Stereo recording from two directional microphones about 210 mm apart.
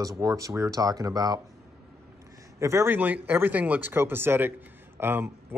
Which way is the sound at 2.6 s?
15° right (ahead or behind).